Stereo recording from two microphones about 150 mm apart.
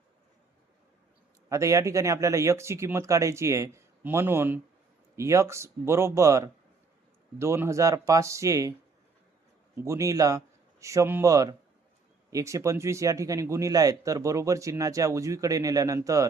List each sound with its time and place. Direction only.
1.5 s speech: 20° right (ahead or behind)
9.7 s a man's voice: 20° right (ahead or behind)